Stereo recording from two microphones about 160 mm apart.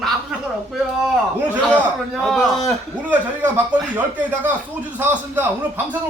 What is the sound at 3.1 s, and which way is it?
Speech, 10° right (ahead or behind).